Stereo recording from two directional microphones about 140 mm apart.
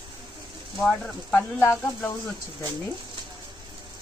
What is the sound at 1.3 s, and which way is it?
Speech, 15° left (ahead or behind).